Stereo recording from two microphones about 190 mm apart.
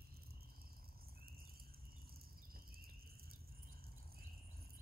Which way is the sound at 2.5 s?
50° right (ahead or behind).